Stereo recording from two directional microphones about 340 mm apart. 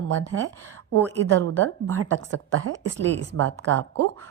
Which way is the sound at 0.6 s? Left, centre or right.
Centre.